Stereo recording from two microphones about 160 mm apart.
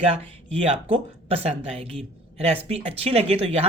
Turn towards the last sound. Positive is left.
turn(degrees=-40)  # may be behind; listen again after turning